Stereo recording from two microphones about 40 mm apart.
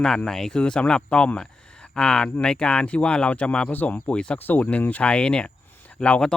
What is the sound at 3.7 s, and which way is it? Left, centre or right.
Speech, left.